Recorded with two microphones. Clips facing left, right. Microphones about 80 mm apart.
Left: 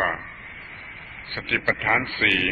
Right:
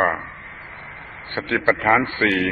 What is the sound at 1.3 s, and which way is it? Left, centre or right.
A man's voice, right.